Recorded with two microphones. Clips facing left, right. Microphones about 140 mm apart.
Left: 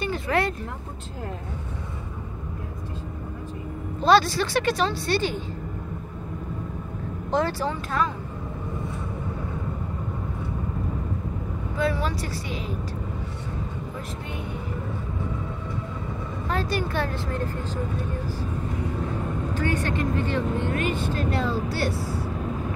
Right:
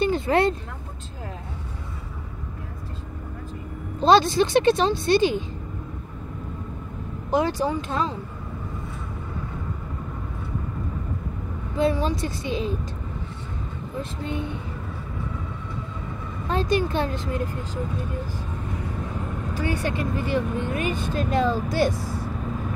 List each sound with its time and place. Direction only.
0.0 s vehicle: 25° right (ahead or behind)
4.0 s a woman's voice: 20° right (ahead or behind)
7.2 s speech: 15° right (ahead or behind)
11.8 s a woman's voice: 20° right (ahead or behind)
14.2 s a woman's voice: 25° right (ahead or behind)
16.4 s a woman's voice: 20° right (ahead or behind)
19.5 s speech: 10° right (ahead or behind)